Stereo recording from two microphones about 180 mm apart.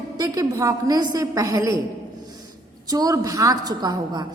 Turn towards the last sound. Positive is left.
turn(degrees=-20)  # may be behind; listen again after turning